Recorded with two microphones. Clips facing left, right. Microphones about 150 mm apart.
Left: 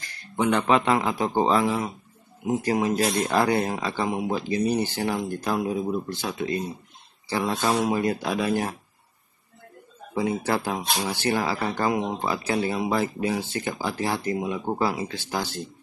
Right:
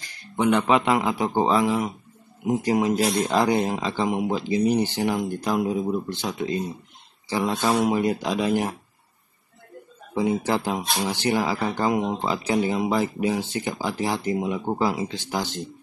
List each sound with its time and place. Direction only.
0.0 s speech: 15° right (ahead or behind)
10.1 s speech: 15° right (ahead or behind)